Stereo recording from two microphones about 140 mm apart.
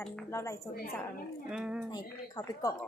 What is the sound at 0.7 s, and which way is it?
Speech, 90° left.